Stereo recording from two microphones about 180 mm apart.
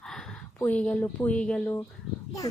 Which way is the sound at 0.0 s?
5° left (ahead or behind).